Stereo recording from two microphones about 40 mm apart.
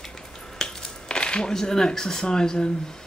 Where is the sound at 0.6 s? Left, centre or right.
Left.